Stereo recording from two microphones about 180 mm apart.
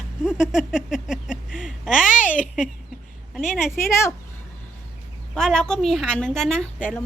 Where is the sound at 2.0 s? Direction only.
45° left (ahead or behind).